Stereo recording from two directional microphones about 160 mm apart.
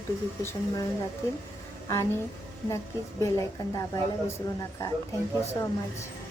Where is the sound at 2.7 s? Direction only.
20° left (ahead or behind).